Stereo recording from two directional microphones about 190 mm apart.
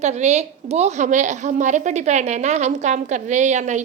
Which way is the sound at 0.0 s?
35° right (ahead or behind).